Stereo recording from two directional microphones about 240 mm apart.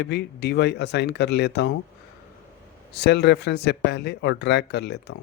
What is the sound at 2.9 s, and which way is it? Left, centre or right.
Speech, left.